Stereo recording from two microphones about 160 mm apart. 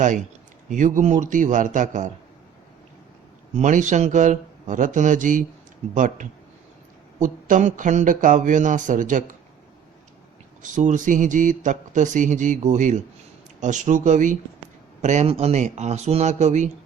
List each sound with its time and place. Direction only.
0.7 s a man's voice: 55° right (ahead or behind)
3.5 s a man's voice: 50° right (ahead or behind)
10.6 s a man's voice: 55° right (ahead or behind)